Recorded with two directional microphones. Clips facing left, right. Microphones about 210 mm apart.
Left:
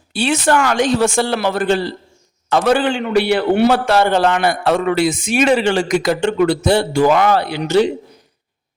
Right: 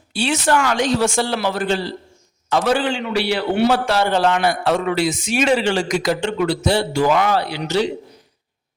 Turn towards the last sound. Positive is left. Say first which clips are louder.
# left 5 dB
turn(degrees=55)  # may be behind; listen again after turning